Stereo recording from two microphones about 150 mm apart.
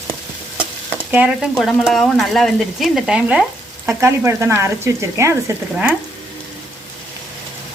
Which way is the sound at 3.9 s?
20° right (ahead or behind).